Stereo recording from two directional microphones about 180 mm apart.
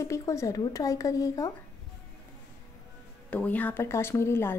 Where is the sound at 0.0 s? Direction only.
15° left (ahead or behind).